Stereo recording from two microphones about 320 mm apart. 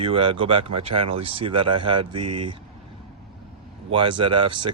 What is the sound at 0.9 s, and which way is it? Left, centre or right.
Speech, right.